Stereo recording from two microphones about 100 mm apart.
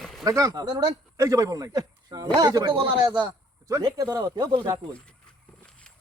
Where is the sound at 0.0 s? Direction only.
Centre (ahead or behind).